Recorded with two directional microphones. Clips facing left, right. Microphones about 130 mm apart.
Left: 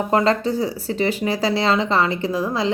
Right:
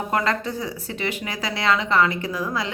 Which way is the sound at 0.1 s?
30° left (ahead or behind).